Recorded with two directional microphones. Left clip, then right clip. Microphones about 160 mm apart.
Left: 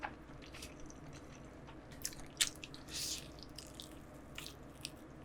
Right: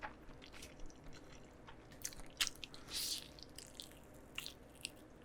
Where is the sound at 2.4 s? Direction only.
35° right (ahead or behind).